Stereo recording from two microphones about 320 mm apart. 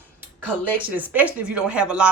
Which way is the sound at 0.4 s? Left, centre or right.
Centre.